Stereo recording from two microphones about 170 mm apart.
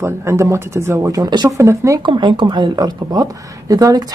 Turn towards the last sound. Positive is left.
turn(degrees=-20)  # may be behind; listen again after turning